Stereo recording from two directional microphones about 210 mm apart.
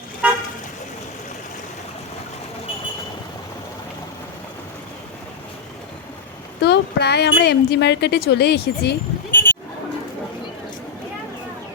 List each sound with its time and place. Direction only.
0.2 s car: 5° right (ahead or behind)
6.6 s a woman's voice: 50° left (ahead or behind)
9.3 s goat: 10° left (ahead or behind)